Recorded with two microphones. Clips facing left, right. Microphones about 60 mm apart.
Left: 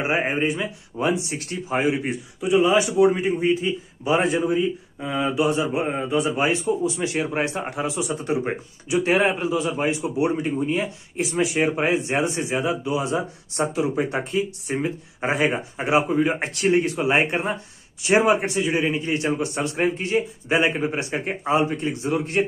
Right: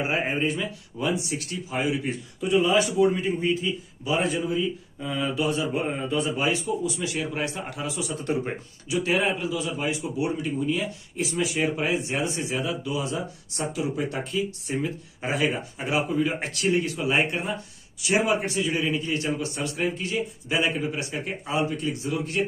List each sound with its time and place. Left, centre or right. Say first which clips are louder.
0.0 s speech: left 3 dB; left
0.9 s speech: left 4 dB; left
2.4 s speech: left 3 dB; centre
6.4 s speech: left 4 dB; left
8.2 s speech: left 3 dB; left
9.0 s speech: left 4 dB; left